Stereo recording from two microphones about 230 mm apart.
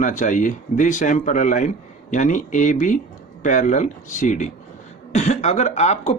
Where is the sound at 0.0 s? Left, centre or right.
Left.